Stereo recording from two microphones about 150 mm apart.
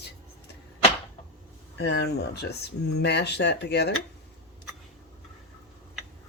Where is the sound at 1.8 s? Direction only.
90° left.